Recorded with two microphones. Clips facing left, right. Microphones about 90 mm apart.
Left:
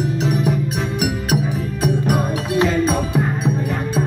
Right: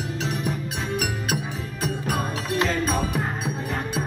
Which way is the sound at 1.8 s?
15° left (ahead or behind).